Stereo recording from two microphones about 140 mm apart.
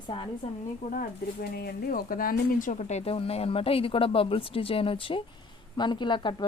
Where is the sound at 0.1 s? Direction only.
40° left (ahead or behind).